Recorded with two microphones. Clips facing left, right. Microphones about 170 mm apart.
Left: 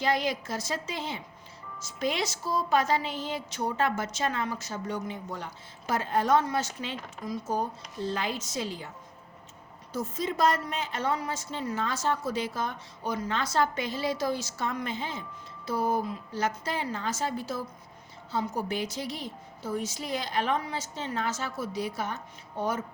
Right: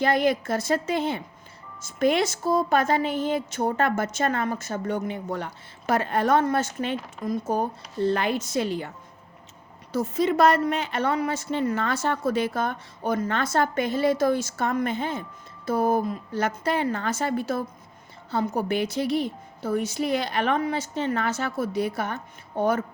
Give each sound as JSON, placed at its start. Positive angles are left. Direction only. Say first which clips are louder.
{"t": 0.0, "sound": "a woman's voice", "louder": "right 6 dB", "side_deg": -55}
{"t": 9.9, "sound": "a woman's voice", "louder": "right 8 dB", "side_deg": -70}